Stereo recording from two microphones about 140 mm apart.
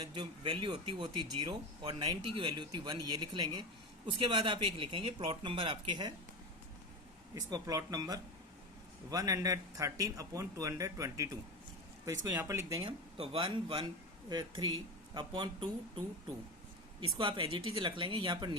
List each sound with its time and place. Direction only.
0.0 s speech: 35° right (ahead or behind)
7.3 s speech: 25° right (ahead or behind)
12.8 s speech: 45° right (ahead or behind)
17.2 s speech: 40° right (ahead or behind)